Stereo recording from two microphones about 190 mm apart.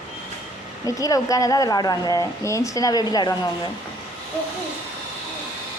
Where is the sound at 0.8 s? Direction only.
20° left (ahead or behind).